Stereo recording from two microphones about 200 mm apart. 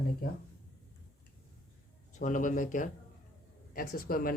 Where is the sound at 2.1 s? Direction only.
40° left (ahead or behind).